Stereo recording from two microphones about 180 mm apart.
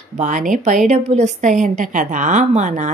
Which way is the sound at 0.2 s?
45° right (ahead or behind).